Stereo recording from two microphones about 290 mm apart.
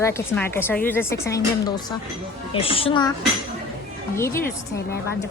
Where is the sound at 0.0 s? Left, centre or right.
Centre.